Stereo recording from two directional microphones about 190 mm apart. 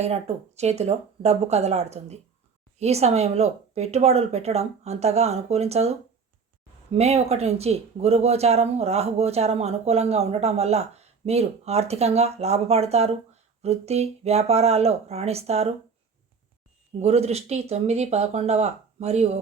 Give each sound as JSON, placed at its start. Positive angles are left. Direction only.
{"t": 0.0, "sound": "speech", "side_deg": -35}
{"t": 17.0, "sound": "speech", "side_deg": -35}